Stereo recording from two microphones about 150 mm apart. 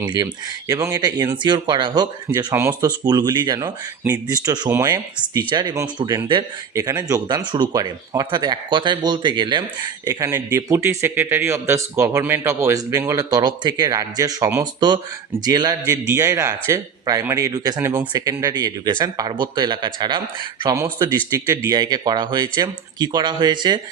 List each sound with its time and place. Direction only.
0.7 s speech: 25° right (ahead or behind)
2.8 s speech: 30° right (ahead or behind)
10.1 s speech: 20° right (ahead or behind)
21.2 s speech: 20° right (ahead or behind)